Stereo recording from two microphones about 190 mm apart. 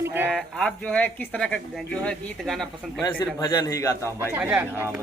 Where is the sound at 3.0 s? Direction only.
20° left (ahead or behind).